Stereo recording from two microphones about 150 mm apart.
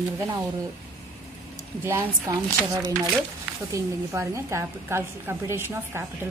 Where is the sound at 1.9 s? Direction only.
20° right (ahead or behind).